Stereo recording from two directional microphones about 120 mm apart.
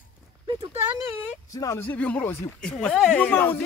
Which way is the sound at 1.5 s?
25° left (ahead or behind).